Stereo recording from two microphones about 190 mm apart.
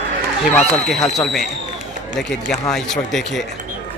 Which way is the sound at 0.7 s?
Centre (ahead or behind).